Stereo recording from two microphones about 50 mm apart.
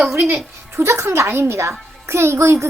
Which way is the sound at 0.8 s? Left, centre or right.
Right.